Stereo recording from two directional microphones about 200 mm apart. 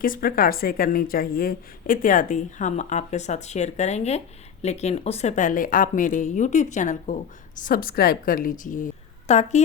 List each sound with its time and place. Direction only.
0.0 s a woman's voice: 45° left (ahead or behind)